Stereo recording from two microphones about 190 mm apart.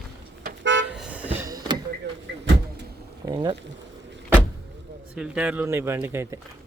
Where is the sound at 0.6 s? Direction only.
75° right (ahead or behind).